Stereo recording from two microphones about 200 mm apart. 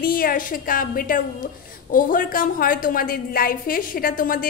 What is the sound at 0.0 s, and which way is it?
A woman's voice, 45° left (ahead or behind).